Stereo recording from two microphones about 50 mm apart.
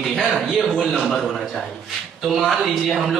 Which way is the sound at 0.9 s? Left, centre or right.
Centre.